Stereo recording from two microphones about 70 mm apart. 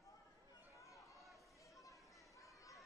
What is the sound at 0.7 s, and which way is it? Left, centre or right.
Chatter, left.